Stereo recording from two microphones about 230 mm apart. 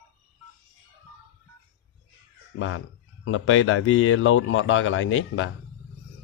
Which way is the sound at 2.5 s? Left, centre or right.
Left.